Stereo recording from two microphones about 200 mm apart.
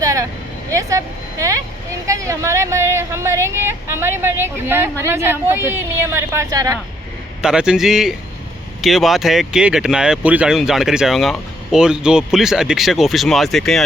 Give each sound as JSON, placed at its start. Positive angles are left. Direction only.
{"t": 0.0, "sound": "vehicle", "side_deg": -15}
{"t": 0.7, "sound": "speech", "side_deg": -15}
{"t": 7.4, "sound": "speech", "side_deg": -5}